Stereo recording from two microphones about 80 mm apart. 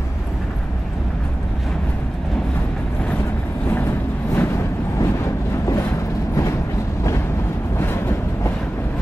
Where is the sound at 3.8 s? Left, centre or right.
Left.